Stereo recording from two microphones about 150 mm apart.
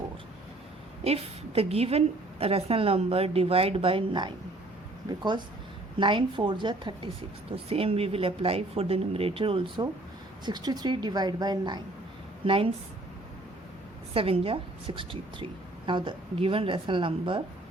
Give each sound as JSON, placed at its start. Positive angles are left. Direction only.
{"t": 1.0, "sound": "a woman's voice", "side_deg": -40}
{"t": 14.1, "sound": "a woman's voice", "side_deg": -40}